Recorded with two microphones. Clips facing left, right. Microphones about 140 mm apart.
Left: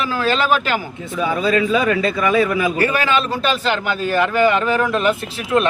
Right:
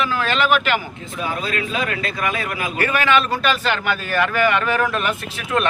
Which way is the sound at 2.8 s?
30° left (ahead or behind).